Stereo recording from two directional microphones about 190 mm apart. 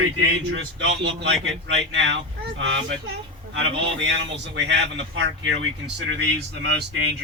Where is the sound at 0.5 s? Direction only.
70° right (ahead or behind).